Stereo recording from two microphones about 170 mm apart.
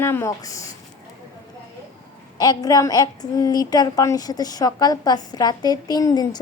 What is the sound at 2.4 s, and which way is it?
A woman's voice, 20° left (ahead or behind).